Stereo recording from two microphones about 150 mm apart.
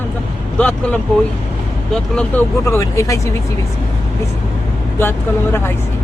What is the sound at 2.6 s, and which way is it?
Speech, 20° left (ahead or behind).